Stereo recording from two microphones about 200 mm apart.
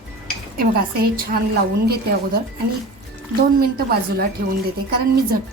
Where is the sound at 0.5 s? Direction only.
50° right (ahead or behind).